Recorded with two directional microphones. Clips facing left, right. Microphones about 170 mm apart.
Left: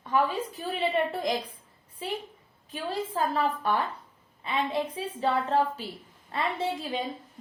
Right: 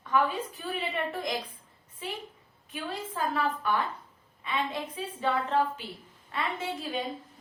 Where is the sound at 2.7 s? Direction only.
35° left (ahead or behind).